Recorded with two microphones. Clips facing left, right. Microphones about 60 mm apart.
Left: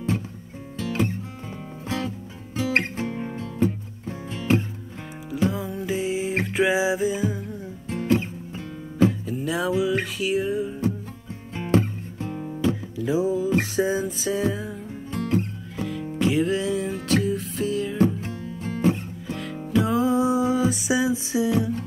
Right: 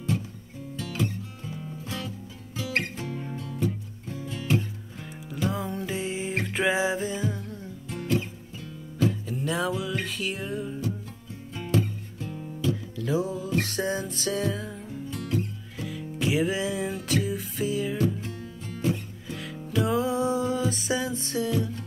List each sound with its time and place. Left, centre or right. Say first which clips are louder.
0.7 s music: left 5 dB; left
5.5 s music: left 3 dB; centre
7.9 s music: left 5 dB; left
9.3 s music: left 3 dB; centre
11.5 s music: left 5 dB; left
12.9 s music: left 5 dB; centre
15.0 s music: left 6 dB; left
15.8 s music: left 6 dB; centre
17.9 s music: left 5 dB; left
19.8 s music: left 3 dB; centre